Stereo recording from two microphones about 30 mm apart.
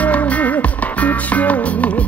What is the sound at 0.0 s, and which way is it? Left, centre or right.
Music, left.